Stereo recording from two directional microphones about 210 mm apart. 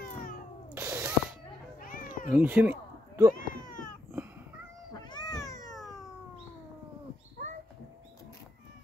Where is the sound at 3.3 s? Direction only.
40° left (ahead or behind).